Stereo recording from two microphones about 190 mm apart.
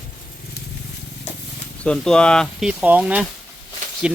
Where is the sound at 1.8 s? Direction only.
5° left (ahead or behind).